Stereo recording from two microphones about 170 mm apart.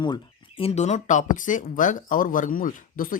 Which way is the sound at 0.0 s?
30° left (ahead or behind).